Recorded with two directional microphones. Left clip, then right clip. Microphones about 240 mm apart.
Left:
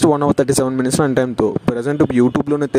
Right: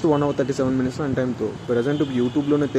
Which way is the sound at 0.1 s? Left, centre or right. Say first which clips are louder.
Left 6 dB; left.